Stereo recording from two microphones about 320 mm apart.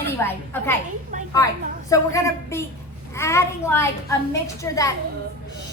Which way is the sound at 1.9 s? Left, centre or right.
Centre.